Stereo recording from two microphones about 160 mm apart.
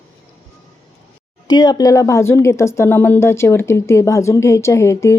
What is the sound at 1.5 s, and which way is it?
A woman's voice, 25° left (ahead or behind).